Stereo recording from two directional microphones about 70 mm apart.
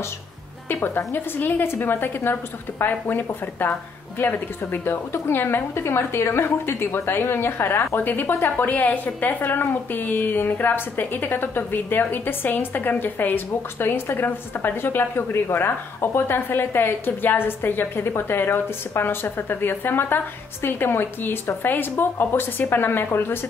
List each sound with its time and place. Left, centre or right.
0.7 s a woman's voice: left